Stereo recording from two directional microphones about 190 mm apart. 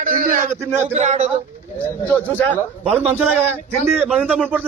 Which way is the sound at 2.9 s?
10° right (ahead or behind).